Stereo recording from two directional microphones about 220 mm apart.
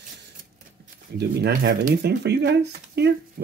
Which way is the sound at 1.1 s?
50° right (ahead or behind).